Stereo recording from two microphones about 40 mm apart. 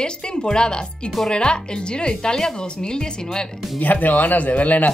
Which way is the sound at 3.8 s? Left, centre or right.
Left.